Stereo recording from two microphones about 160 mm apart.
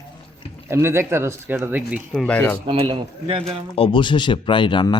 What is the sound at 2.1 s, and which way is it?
Speech, 5° left (ahead or behind).